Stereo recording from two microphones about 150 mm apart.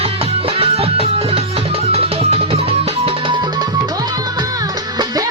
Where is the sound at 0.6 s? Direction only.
40° right (ahead or behind).